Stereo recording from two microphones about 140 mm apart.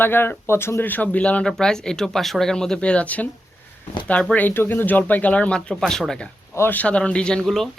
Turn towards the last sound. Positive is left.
turn(degrees=0)  # may be behind; listen again after turning